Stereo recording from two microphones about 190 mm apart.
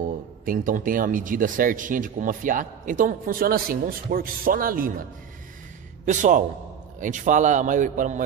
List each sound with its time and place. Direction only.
0.5 s speech: 45° right (ahead or behind)
6.0 s a man's voice: 40° right (ahead or behind)